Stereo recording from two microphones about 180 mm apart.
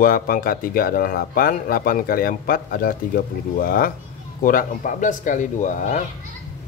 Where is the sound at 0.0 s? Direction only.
50° left (ahead or behind).